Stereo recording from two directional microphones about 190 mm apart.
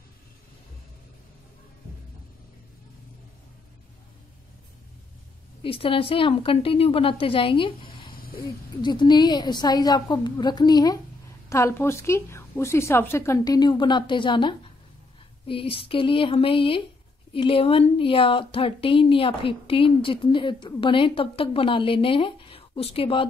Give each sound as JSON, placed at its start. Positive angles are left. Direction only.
{"t": 5.6, "sound": "a woman's voice", "side_deg": 30}